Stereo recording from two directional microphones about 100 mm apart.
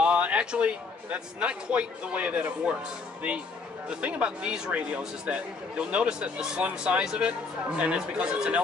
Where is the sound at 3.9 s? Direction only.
10° right (ahead or behind).